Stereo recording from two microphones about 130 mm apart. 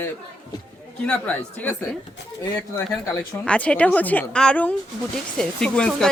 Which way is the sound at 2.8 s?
15° left (ahead or behind).